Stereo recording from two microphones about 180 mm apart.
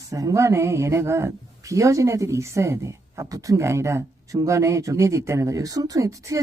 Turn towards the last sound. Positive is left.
turn(degrees=-15)  # may be behind; listen again after turning